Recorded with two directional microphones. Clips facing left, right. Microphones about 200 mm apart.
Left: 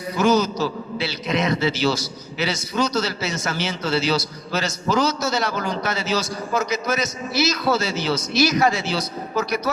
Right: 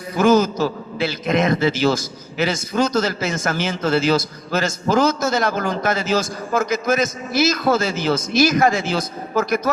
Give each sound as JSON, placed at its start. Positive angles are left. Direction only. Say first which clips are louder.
{"t": 0.2, "sound": "speech", "louder": "right 4 dB", "side_deg": -50}